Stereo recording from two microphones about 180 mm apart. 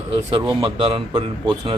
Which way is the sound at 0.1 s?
30° right (ahead or behind).